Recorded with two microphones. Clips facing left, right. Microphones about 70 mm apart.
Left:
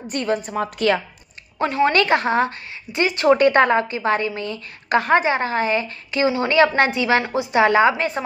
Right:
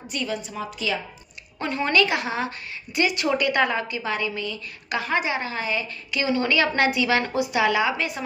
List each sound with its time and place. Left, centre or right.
0.0 s a woman's voice: left
1.9 s a woman's voice: left